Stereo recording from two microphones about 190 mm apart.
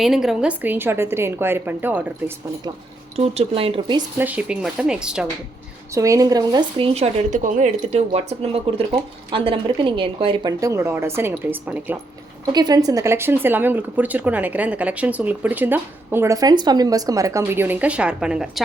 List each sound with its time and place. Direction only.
0.0 s speech: centre (ahead or behind)
3.2 s a woman's voice: 30° right (ahead or behind)
4.2 s speech: 5° right (ahead or behind)
5.9 s a woman's voice: 15° right (ahead or behind)
12.5 s speech: 20° right (ahead or behind); by 18.6 s 5° right (ahead or behind)